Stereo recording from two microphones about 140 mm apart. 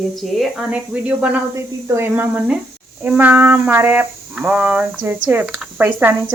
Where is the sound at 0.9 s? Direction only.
10° right (ahead or behind).